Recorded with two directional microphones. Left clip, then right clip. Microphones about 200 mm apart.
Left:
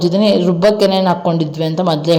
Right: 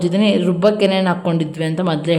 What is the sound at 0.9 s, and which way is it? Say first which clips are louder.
Speech: left 4 dB; 20° right (ahead or behind).